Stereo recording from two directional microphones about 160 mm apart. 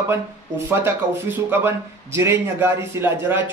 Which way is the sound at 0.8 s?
15° right (ahead or behind).